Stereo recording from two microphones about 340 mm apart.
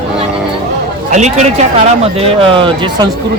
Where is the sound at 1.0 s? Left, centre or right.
Right.